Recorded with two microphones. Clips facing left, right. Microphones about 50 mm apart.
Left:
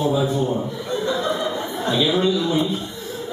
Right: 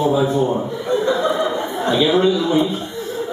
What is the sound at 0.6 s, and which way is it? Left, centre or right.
Speech, centre.